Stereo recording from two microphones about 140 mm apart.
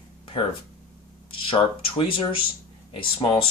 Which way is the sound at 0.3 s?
35° left (ahead or behind).